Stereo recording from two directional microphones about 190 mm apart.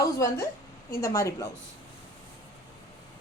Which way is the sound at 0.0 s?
15° left (ahead or behind).